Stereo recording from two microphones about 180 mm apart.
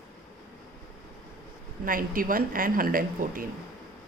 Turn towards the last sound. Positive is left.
turn(degrees=-50)  # may be behind; listen again after turning